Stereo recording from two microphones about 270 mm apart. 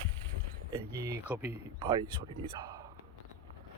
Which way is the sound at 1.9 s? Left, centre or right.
Centre.